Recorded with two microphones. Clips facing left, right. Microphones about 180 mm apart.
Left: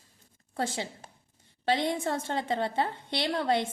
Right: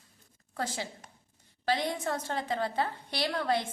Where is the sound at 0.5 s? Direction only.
25° left (ahead or behind).